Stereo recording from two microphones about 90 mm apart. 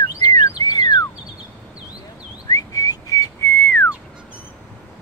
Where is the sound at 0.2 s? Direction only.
45° left (ahead or behind).